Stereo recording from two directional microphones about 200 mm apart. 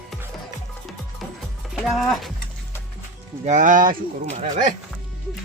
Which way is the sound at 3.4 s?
40° right (ahead or behind).